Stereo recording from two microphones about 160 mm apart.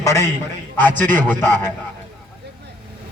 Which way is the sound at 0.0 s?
20° left (ahead or behind).